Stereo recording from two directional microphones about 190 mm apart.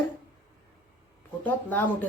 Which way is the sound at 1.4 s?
10° left (ahead or behind).